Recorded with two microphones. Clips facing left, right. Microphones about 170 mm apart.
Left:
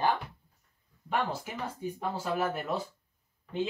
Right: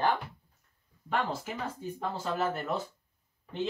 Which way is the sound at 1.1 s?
10° left (ahead or behind).